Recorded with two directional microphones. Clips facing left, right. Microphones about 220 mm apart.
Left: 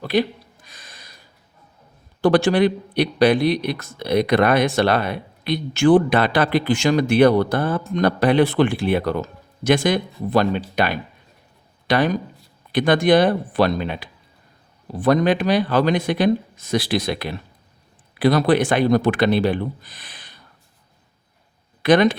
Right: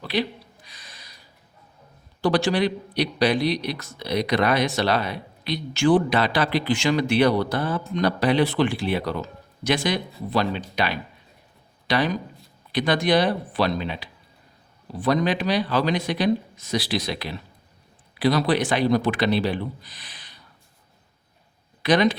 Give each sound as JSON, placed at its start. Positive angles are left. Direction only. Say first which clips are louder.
{"t": 0.0, "sound": "a sound", "louder": "left 6 dB", "side_deg": 50}
{"t": 2.2, "sound": "a man's voice", "louder": "left 5 dB", "side_deg": 50}
{"t": 21.8, "sound": "a man's voice", "louder": "left 4 dB", "side_deg": 50}